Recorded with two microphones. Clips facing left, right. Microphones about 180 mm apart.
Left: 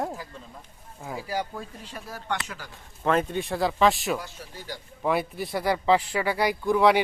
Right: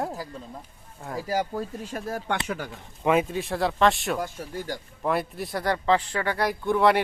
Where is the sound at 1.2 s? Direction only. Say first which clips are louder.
Right 5 dB; 40° right (ahead or behind); by 2.7 s 55° right (ahead or behind).